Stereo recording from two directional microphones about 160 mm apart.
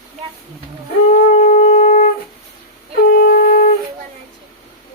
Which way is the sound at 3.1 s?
60° left (ahead or behind).